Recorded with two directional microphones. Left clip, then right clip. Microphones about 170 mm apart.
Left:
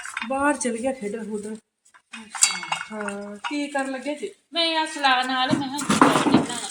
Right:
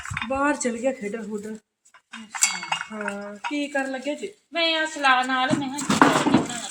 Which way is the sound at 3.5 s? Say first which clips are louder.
Even; 15° left (ahead or behind).